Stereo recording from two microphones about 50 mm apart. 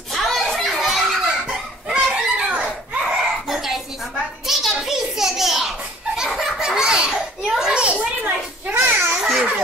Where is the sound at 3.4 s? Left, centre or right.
Centre.